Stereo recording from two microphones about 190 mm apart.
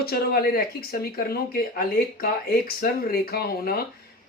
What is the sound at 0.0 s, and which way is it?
Speech, 55° left (ahead or behind).